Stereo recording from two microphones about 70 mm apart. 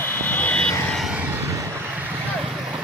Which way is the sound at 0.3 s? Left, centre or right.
Left.